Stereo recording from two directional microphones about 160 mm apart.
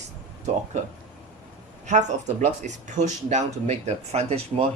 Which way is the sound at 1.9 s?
50° right (ahead or behind).